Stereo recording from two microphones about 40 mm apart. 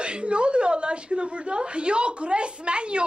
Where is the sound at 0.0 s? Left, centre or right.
Right.